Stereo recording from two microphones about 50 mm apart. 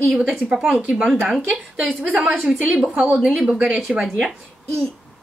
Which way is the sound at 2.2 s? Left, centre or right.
Centre.